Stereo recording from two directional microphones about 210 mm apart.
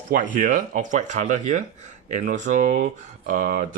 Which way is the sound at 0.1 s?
40° right (ahead or behind).